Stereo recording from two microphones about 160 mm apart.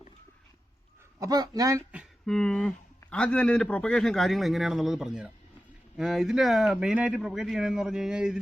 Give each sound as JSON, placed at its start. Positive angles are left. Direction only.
{"t": 1.2, "sound": "speech", "side_deg": -25}
{"t": 2.2, "sound": "speech", "side_deg": 5}